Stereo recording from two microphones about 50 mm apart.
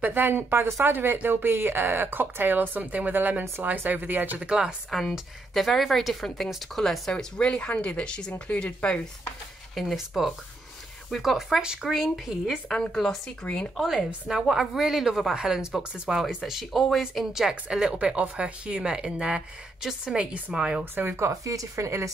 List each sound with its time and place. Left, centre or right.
0.0 s a woman's voice: right
4.4 s speech: centre
5.5 s a woman's voice: centre; by 9.0 s left
9.8 s a woman's voice: centre
12.6 s a woman's voice: centre
13.4 s a woman's voice: centre
13.7 s a woman's voice: centre
17.9 s speech: right
20.9 s a woman's voice: right
21.2 s speech: right